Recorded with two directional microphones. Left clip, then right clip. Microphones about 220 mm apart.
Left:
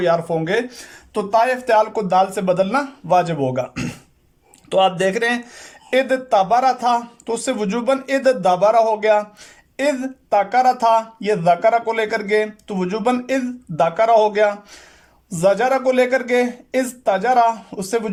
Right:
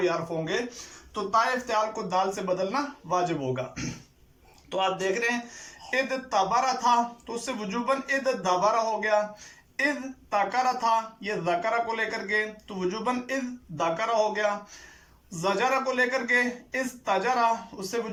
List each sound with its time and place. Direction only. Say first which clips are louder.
0.0 s speech: left 10 dB; 50° left (ahead or behind)